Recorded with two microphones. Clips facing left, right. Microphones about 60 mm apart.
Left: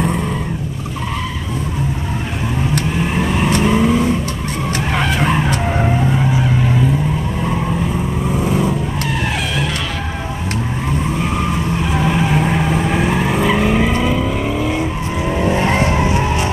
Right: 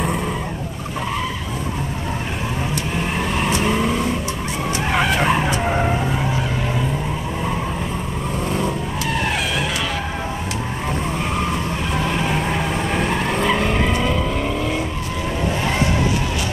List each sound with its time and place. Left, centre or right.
3.0 s vehicle: centre
8.3 s vehicle: centre
11.9 s vehicle: centre
15.4 s vehicle: left